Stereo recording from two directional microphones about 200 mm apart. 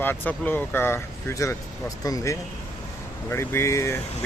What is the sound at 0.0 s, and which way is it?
Speech, 10° left (ahead or behind).